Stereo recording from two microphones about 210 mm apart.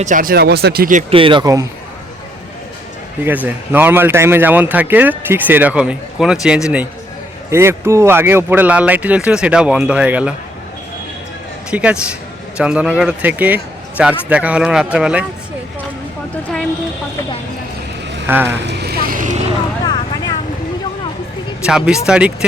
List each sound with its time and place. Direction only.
0.0 s speech: 40° right (ahead or behind)
1.1 s speech: 25° right (ahead or behind)
3.2 s speech: 10° right (ahead or behind)
11.7 s speech: 5° right (ahead or behind)
18.3 s speech: 10° right (ahead or behind)
18.5 s vehicle: 55° right (ahead or behind); by 19.4 s 40° right (ahead or behind)
19.8 s vehicle: 20° left (ahead or behind)
21.7 s speech: 5° right (ahead or behind)